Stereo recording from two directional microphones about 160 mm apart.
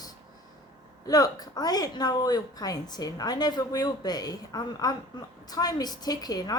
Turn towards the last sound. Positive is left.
turn(degrees=25)  # may be behind; listen again after turning